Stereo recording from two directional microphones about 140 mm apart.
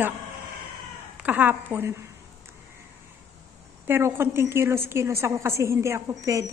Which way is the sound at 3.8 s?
15° right (ahead or behind).